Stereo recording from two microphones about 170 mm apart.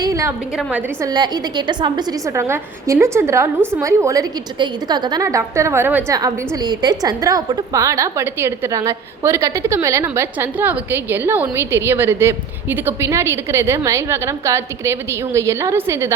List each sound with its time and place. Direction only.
0.0 s a sound: 20° right (ahead or behind)
0.5 s a woman's voice: 5° right (ahead or behind)
1.0 s a woman's voice: 25° right (ahead or behind)